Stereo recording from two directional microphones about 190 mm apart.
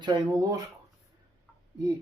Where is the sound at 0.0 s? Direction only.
20° right (ahead or behind).